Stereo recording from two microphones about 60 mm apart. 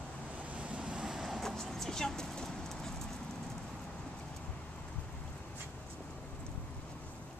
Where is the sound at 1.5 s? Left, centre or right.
Centre.